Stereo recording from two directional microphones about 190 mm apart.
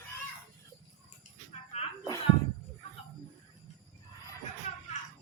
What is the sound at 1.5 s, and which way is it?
Music, 35° left (ahead or behind).